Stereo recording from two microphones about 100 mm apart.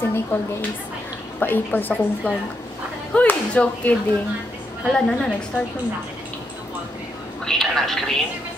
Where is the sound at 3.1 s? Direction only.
10° left (ahead or behind).